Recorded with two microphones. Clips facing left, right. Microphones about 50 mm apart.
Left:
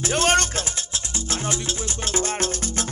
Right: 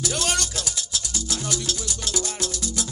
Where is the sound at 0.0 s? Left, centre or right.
Left.